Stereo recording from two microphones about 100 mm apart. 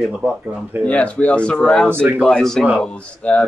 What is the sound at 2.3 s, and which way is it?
Speech, 5° left (ahead or behind).